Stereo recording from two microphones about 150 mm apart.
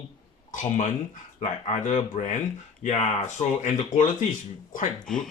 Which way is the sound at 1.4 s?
50° left (ahead or behind).